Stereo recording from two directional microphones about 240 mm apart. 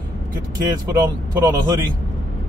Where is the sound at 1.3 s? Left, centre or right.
Centre.